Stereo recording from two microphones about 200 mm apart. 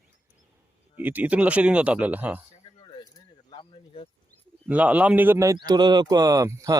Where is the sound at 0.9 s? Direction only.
10° right (ahead or behind).